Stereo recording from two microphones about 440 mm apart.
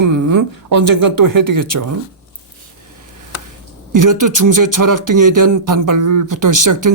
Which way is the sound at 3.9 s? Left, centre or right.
Right.